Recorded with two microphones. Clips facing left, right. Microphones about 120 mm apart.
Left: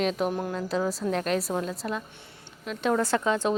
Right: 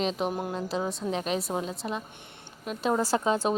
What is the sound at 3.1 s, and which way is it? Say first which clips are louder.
Speech: even; 25° right (ahead or behind).